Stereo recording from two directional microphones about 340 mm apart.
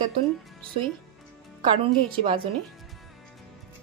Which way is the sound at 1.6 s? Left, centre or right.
Centre.